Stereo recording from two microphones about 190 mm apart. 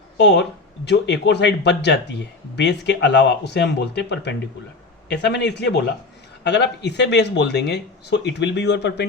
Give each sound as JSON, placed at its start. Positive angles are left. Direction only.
{"t": 0.2, "sound": "speech", "side_deg": 65}